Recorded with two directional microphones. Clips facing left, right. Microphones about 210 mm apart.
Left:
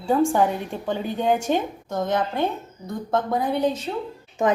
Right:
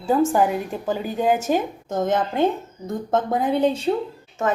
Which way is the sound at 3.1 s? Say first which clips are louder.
Right 2 dB; 20° right (ahead or behind).